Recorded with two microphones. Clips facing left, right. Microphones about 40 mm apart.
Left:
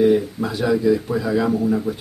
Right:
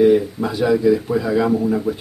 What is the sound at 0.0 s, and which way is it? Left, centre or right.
Speech, centre.